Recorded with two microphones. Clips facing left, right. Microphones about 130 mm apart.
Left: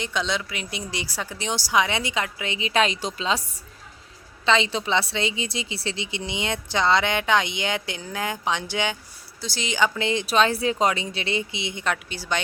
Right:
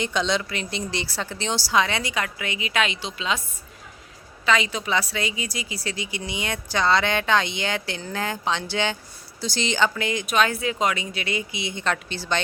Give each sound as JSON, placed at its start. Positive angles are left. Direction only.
{"t": 0.0, "sound": "speech", "side_deg": 0}
{"t": 4.4, "sound": "a woman's voice", "side_deg": 25}
{"t": 10.0, "sound": "a woman's voice", "side_deg": 25}
{"t": 11.8, "sound": "speech", "side_deg": 10}